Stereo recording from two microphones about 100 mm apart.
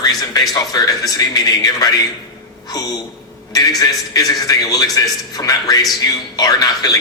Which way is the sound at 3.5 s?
40° left (ahead or behind).